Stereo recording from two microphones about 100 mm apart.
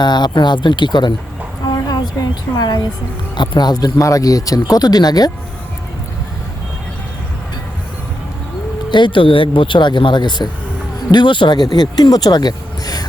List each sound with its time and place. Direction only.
0.0 s speech: 45° left (ahead or behind)
1.6 s a sound: 40° left (ahead or behind)
2.6 s speech: 45° left (ahead or behind)
8.9 s speech: 50° left (ahead or behind)